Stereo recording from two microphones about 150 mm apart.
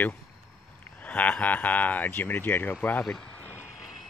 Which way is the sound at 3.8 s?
Centre (ahead or behind).